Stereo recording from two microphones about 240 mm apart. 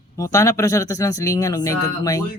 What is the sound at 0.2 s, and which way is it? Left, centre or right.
Speech, centre.